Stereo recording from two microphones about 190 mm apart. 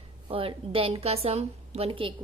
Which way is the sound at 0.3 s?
30° right (ahead or behind).